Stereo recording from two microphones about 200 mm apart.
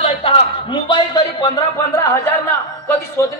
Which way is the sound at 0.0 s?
25° left (ahead or behind).